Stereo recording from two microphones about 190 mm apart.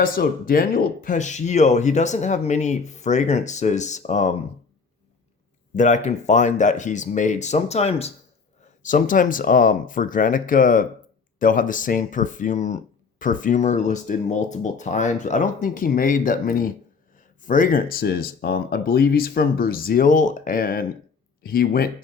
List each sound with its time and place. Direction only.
0.0 s speech: 50° left (ahead or behind)
5.7 s speech: 40° left (ahead or behind)